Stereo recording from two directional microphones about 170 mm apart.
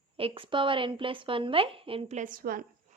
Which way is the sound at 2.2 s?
55° right (ahead or behind).